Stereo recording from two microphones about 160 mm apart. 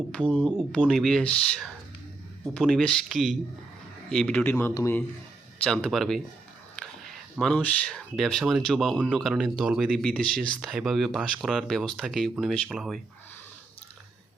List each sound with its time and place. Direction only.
0.1 s a man's voice: 5° left (ahead or behind)
5.6 s speech: 5° left (ahead or behind)
7.3 s speech: centre (ahead or behind)